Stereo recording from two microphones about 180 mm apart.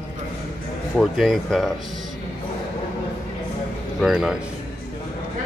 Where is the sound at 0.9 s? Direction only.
Centre (ahead or behind).